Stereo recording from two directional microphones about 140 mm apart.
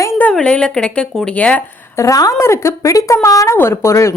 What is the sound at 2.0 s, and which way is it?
Speech, 25° left (ahead or behind).